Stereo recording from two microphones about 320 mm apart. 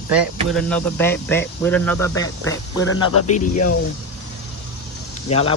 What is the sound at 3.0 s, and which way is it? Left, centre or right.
Speech, left.